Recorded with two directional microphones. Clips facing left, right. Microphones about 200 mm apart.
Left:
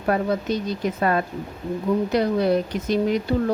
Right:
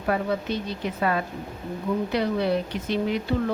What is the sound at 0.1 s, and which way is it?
Speech, 40° left (ahead or behind).